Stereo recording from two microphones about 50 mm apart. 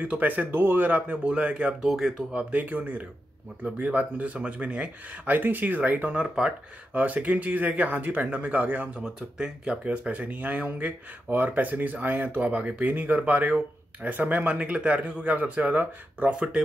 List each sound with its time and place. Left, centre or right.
0.0 s speech: right
1.9 s speech: centre
2.3 s speech: right
6.2 s speech: centre
6.9 s speech: right